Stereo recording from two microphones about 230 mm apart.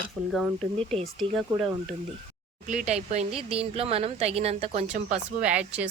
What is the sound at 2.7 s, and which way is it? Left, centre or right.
Speech, right.